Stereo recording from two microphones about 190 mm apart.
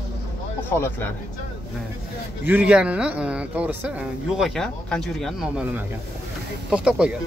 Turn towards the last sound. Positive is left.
turn(degrees=-5)  # may be behind; listen again after turning